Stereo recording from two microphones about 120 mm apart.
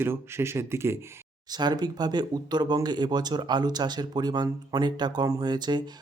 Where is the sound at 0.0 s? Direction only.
20° right (ahead or behind).